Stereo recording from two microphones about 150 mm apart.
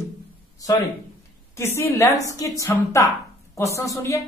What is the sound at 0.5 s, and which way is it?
Speech, 25° left (ahead or behind).